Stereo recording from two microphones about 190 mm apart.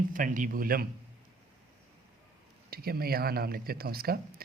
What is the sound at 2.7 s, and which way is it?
Speech, 55° right (ahead or behind).